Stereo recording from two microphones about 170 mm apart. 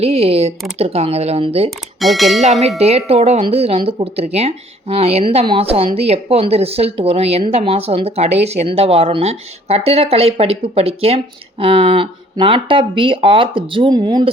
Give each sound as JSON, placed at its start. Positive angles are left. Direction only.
{"t": 0.0, "sound": "speech", "side_deg": -35}
{"t": 2.0, "sound": "speech", "side_deg": 0}
{"t": 2.7, "sound": "speech", "side_deg": -35}